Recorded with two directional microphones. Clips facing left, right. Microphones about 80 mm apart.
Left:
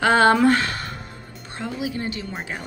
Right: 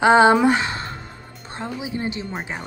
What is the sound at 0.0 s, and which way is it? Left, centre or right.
A woman's voice, centre.